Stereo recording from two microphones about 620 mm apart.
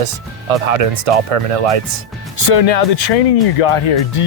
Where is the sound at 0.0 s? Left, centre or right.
Right.